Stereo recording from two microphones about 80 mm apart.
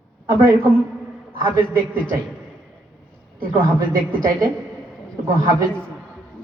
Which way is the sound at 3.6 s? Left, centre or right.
Right.